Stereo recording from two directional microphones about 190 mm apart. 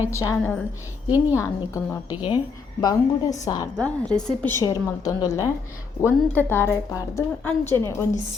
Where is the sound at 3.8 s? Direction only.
5° left (ahead or behind).